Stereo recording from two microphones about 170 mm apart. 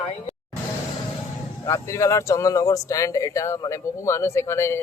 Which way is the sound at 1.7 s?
15° left (ahead or behind).